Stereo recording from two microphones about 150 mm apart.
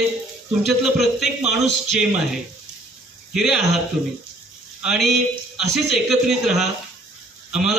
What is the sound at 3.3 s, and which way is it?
Speech, centre (ahead or behind).